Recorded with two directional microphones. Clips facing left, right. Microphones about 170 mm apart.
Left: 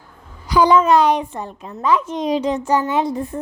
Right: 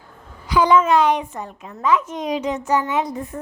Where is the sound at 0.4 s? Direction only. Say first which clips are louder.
Left 2 dB; 35° left (ahead or behind).